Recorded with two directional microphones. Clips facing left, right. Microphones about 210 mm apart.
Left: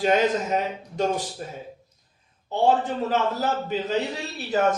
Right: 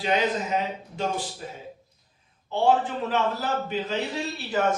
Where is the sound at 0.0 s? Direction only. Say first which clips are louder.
Left 4 dB; 45° left (ahead or behind).